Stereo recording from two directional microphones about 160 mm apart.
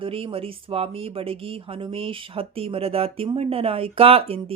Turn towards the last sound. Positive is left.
turn(degrees=-35)  # may be behind; listen again after turning